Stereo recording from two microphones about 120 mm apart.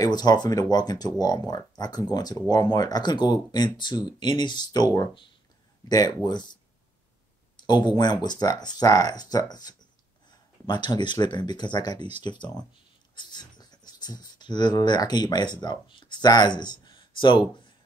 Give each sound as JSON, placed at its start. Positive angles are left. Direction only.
{"t": 0.0, "sound": "speech", "side_deg": 35}